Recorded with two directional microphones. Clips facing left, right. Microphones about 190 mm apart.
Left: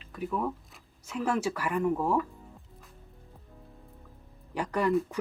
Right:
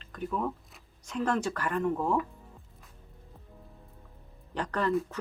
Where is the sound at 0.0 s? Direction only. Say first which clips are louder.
Left 1 dB; 5° left (ahead or behind).